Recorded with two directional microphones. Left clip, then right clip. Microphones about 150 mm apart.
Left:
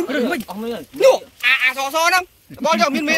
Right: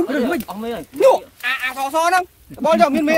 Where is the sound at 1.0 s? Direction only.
65° right (ahead or behind).